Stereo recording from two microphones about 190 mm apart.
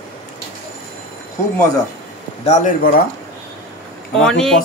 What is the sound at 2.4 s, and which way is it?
Speech, 35° left (ahead or behind).